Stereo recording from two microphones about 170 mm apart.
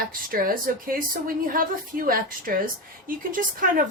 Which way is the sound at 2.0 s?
55° right (ahead or behind).